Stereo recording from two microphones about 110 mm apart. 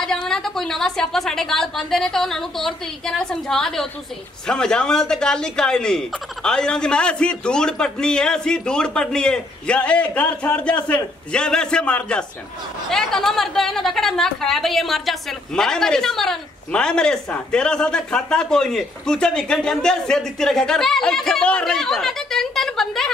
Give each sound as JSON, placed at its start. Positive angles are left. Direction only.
{"t": 0.0, "sound": "a woman's voice", "side_deg": 5}